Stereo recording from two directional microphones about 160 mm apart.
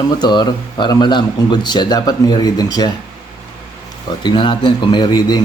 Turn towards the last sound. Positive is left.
turn(degrees=25)  # may be behind; listen again after turning